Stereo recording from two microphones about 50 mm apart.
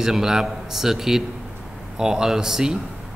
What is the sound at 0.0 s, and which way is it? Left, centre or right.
A man's voice, centre.